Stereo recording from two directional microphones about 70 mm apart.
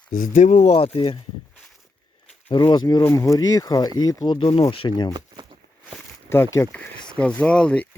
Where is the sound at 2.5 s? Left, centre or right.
Left.